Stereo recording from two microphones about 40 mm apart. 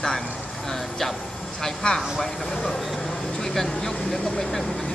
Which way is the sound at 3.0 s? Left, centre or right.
Centre.